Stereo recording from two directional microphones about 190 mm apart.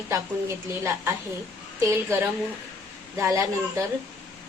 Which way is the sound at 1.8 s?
15° right (ahead or behind).